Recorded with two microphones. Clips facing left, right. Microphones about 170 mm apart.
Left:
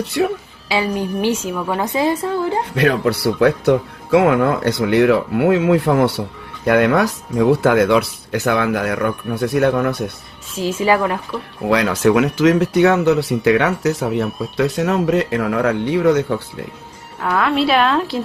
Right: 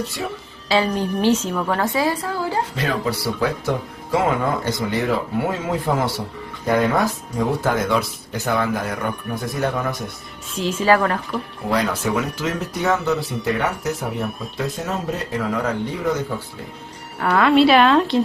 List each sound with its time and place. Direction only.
0.2 s speech: 70° left (ahead or behind)
0.9 s speech: 10° left (ahead or behind)
2.7 s speech: 65° left (ahead or behind)
6.7 s speech: 70° left (ahead or behind)
10.5 s speech: 10° left (ahead or behind)
11.7 s speech: 75° left (ahead or behind)
17.2 s a woman's voice: centre (ahead or behind)